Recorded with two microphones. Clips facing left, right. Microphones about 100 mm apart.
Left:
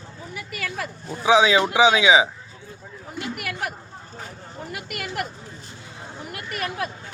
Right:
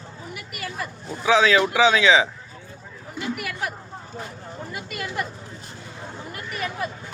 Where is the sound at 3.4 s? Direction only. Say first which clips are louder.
Even; 55° left (ahead or behind).